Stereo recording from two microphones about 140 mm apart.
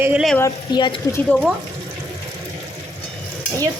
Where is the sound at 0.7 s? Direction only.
35° left (ahead or behind).